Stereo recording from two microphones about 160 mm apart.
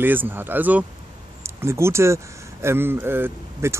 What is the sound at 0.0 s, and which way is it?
A man's voice, 10° right (ahead or behind).